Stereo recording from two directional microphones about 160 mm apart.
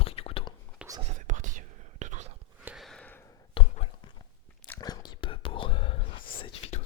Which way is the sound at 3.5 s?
40° left (ahead or behind).